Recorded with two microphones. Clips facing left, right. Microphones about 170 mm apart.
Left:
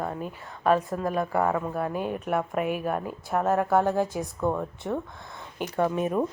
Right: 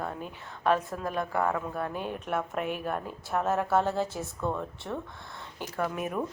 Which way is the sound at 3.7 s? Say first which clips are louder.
Left 4 dB; 15° left (ahead or behind).